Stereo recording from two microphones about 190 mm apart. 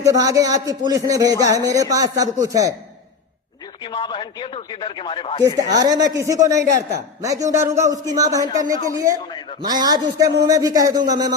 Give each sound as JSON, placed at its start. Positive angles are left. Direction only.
{"t": 0.0, "sound": "speech", "side_deg": -20}
{"t": 3.8, "sound": "speech", "side_deg": 25}
{"t": 5.7, "sound": "a man's voice", "side_deg": -20}